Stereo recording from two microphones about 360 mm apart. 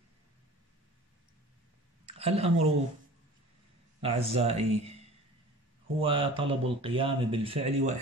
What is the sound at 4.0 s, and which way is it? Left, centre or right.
Speech, centre.